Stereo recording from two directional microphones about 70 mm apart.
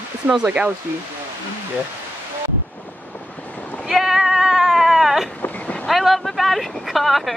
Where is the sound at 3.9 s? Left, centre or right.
Centre.